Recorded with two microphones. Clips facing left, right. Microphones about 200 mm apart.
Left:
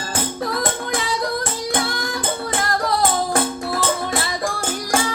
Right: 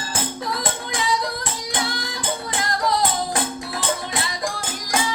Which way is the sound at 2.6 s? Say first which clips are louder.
Left 1 dB; 45° left (ahead or behind).